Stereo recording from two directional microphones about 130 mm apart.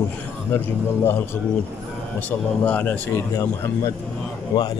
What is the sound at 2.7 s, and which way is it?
A man's voice, 15° left (ahead or behind).